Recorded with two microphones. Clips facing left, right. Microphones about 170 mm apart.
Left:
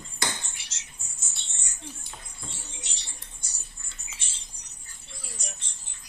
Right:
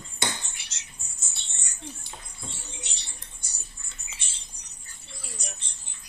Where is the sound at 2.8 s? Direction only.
60° right (ahead or behind).